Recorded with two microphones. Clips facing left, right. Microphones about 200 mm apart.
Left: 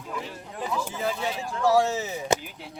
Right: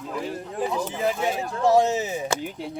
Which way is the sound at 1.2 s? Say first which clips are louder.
Right 4 dB; 50° right (ahead or behind).